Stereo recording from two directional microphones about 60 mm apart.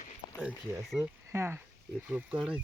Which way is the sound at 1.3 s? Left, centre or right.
Right.